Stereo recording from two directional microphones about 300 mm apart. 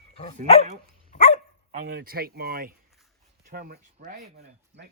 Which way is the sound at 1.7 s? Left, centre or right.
Right.